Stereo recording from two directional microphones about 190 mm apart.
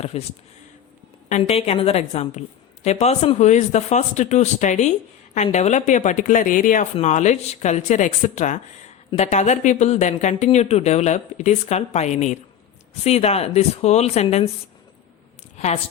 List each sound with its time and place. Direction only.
0.0 s speech: 35° left (ahead or behind)
1.3 s speech: 30° left (ahead or behind)
15.5 s a woman's voice: 35° left (ahead or behind)